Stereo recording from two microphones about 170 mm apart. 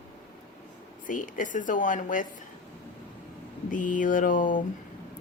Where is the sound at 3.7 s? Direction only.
50° left (ahead or behind).